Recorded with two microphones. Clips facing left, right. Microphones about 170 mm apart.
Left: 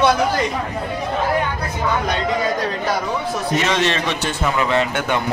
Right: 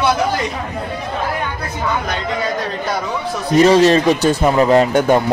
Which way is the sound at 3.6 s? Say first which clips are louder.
Right 13 dB; 40° right (ahead or behind).